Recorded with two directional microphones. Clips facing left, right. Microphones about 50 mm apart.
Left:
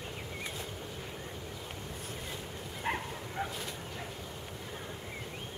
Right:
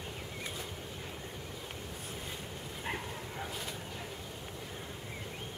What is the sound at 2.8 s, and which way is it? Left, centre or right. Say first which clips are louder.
Bow-wow: left 4 dB; left.